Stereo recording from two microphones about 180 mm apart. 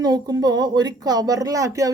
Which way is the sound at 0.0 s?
20° right (ahead or behind).